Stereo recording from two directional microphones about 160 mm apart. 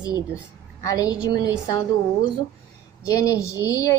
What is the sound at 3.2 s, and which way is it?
Speech, 20° left (ahead or behind).